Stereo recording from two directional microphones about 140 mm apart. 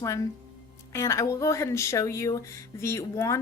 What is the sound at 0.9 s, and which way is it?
Speech, 20° left (ahead or behind).